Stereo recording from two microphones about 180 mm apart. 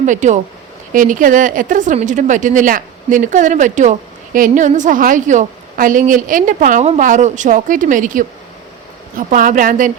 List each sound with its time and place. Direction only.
0.0 s a woman's voice: 45° right (ahead or behind)